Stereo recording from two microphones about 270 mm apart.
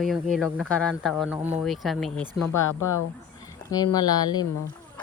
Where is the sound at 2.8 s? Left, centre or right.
Left.